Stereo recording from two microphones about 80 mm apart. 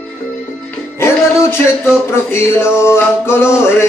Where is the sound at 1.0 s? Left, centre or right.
Left.